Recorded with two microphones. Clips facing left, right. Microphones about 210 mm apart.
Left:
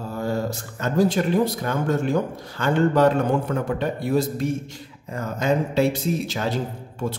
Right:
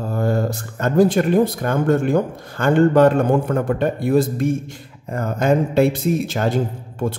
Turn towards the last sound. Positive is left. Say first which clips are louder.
# right 5 dB
turn(degrees=-55)  # may be behind; listen again after turning